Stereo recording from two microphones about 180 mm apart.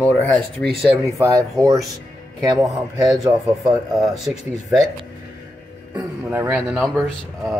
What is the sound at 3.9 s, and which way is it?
Speech, centre (ahead or behind).